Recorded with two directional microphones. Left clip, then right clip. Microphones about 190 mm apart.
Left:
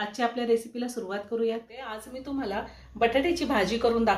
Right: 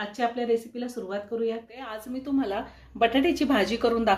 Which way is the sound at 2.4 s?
45° right (ahead or behind).